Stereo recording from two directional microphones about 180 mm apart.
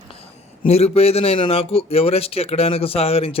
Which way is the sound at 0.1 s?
35° left (ahead or behind).